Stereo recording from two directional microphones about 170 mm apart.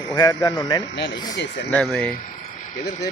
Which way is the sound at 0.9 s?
90° left.